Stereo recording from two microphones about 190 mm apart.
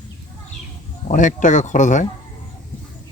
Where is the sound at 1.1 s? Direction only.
40° left (ahead or behind).